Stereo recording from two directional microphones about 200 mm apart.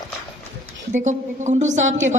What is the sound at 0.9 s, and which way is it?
Speech, 35° right (ahead or behind).